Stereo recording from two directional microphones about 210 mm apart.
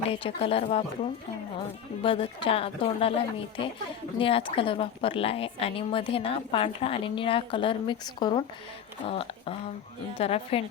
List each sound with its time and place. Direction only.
0.1 s a woman's voice: 25° left (ahead or behind)